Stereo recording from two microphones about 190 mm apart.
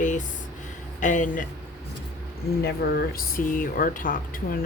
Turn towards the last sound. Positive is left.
turn(degrees=45)  # may be behind; listen again after turning